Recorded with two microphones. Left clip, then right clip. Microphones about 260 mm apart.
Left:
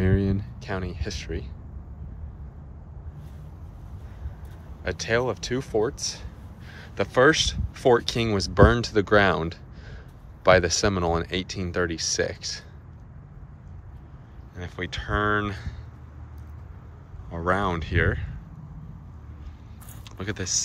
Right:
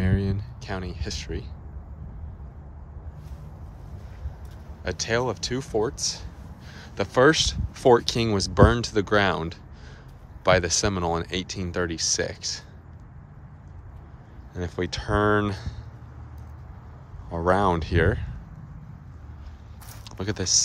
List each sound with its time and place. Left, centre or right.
0.0 s speech: centre
4.8 s speech: centre
14.5 s speech: centre
17.3 s speech: centre
20.1 s speech: centre